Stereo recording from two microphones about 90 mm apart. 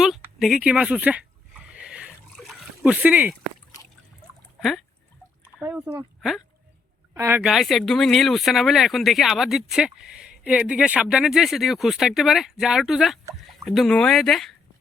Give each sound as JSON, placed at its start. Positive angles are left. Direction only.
{"t": 0.3, "sound": "speech", "side_deg": -5}
{"t": 1.7, "sound": "a sound", "side_deg": -15}
{"t": 2.4, "sound": "splash", "side_deg": 0}
{"t": 2.9, "sound": "speech", "side_deg": -15}
{"t": 5.7, "sound": "speech", "side_deg": -15}
{"t": 7.1, "sound": "speech", "side_deg": -30}
{"t": 7.4, "sound": "speech", "side_deg": 0}